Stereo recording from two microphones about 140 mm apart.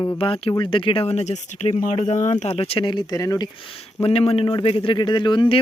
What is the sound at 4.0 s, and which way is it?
Speech, 45° left (ahead or behind).